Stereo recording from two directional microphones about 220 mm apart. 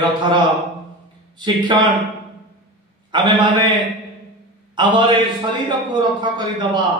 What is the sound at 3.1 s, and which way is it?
Speech, 20° right (ahead or behind).